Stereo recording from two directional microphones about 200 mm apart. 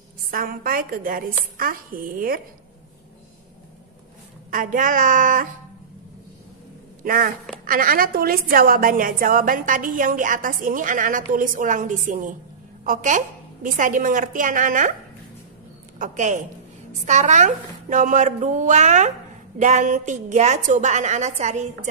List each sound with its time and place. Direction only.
0.3 s a woman's voice: 45° right (ahead or behind)
4.5 s speech: 40° right (ahead or behind)
7.0 s a woman's voice: 45° right (ahead or behind)
16.0 s speech: 40° right (ahead or behind)